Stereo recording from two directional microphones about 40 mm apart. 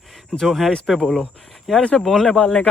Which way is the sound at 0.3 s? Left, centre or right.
Centre.